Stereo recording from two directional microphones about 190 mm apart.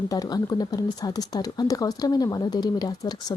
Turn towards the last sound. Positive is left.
turn(degrees=20)  # may be behind; listen again after turning